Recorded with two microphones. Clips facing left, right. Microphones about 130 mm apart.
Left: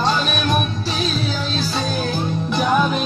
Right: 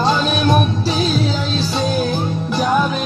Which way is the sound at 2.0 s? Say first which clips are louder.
Right 3 dB; 5° right (ahead or behind).